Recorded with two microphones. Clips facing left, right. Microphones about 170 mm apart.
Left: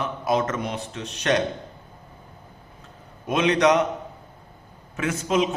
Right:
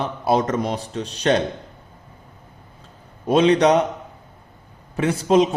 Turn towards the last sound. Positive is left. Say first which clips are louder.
# right 6 dB
turn(degrees=-35)  # may be behind; listen again after turning